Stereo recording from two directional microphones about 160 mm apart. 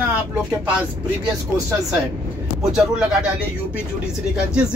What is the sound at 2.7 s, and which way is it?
Speech, 5° right (ahead or behind).